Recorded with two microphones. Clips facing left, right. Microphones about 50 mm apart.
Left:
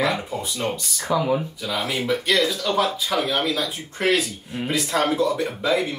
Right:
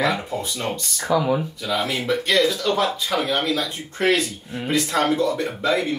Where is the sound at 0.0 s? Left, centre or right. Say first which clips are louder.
Right 1 dB; centre.